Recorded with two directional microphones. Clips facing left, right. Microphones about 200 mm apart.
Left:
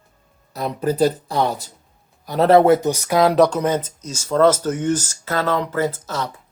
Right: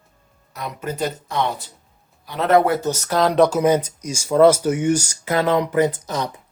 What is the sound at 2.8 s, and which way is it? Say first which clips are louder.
Speech: left 3 dB; 15° left (ahead or behind).